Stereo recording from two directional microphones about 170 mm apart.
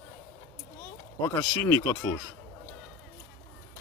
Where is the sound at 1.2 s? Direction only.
20° left (ahead or behind).